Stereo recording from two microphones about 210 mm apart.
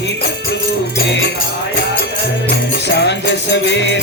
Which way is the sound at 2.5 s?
55° left (ahead or behind).